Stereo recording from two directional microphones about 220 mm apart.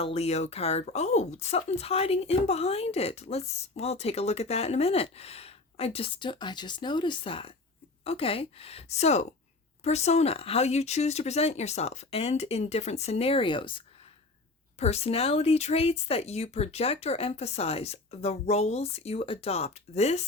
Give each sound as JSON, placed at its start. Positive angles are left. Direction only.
{"t": 0.0, "sound": "speech", "side_deg": 30}